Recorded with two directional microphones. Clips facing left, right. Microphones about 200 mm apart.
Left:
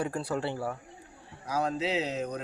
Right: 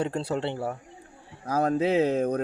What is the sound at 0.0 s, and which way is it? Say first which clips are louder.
Speech: right 3 dB; 25° right (ahead or behind).